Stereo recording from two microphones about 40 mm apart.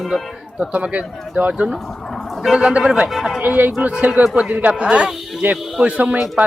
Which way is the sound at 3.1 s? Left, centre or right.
Centre.